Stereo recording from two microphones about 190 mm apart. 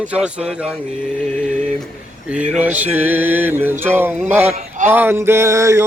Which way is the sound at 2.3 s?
5° right (ahead or behind).